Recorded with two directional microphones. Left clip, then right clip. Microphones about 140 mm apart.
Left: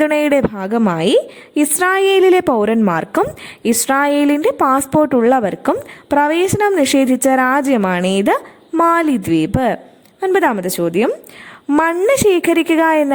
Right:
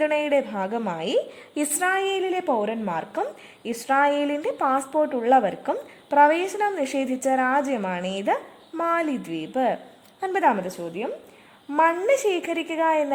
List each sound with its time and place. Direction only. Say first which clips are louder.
0.0 s a woman's voice: left 8 dB; 50° left (ahead or behind)
4.9 s a woman's voice: left 8 dB; 55° left (ahead or behind)
11.7 s a woman's voice: left 6 dB; 50° left (ahead or behind)